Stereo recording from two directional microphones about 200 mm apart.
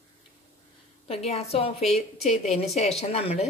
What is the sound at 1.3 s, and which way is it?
Speech, 30° left (ahead or behind).